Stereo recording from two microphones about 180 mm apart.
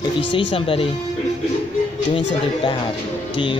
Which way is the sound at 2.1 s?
25° left (ahead or behind).